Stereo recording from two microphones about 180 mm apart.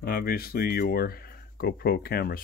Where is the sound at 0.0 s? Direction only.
55° left (ahead or behind).